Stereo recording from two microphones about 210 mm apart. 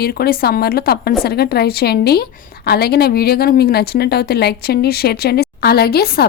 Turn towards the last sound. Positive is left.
turn(degrees=45)  # may be behind; listen again after turning